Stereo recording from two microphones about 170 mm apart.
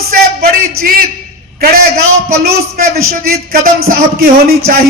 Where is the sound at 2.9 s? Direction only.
60° right (ahead or behind).